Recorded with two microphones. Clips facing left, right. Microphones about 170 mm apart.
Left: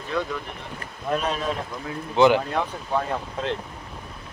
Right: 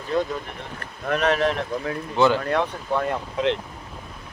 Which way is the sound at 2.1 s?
15° left (ahead or behind).